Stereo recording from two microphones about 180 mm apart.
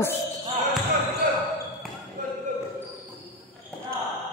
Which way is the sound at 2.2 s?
45° right (ahead or behind).